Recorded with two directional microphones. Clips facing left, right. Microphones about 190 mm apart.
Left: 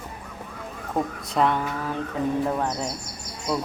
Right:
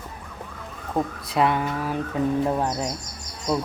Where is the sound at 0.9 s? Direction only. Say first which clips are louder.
Right 1 dB; centre (ahead or behind).